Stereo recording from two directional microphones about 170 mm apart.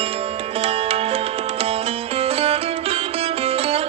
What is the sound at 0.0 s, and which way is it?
Music, 35° right (ahead or behind).